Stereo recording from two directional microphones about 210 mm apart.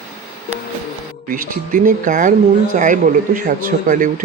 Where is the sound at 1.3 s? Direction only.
40° right (ahead or behind).